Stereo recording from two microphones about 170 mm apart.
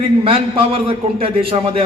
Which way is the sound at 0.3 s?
35° right (ahead or behind).